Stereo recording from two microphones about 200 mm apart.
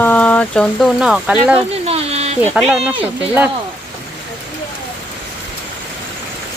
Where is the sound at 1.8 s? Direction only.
30° right (ahead or behind).